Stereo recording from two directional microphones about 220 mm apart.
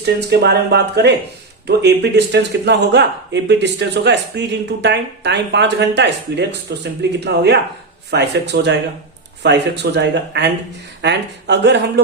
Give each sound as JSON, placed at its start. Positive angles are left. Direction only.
{"t": 0.0, "sound": "speech", "side_deg": -50}